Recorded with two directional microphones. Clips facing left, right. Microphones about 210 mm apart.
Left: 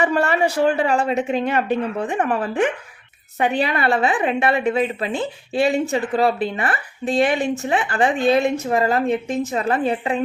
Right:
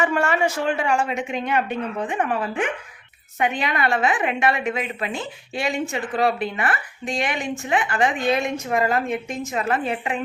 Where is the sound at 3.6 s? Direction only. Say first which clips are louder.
Left 3 dB; 35° left (ahead or behind).